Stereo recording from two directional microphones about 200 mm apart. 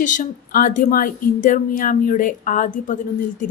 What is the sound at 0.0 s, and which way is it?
A woman's voice, 40° left (ahead or behind).